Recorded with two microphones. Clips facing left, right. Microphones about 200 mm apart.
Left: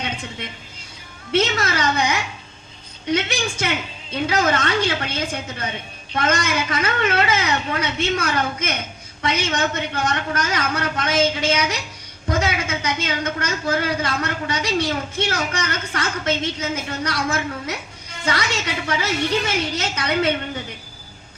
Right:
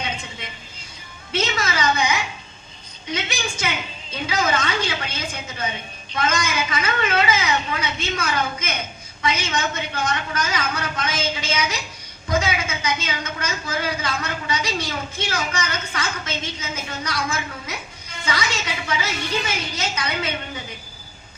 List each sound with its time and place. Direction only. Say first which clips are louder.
1.3 s a woman's voice: left 4 dB; 70° left (ahead or behind)